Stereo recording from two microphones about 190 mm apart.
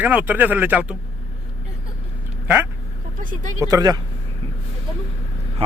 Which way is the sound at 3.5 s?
20° right (ahead or behind).